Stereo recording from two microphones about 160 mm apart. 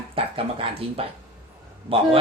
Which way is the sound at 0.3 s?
35° right (ahead or behind).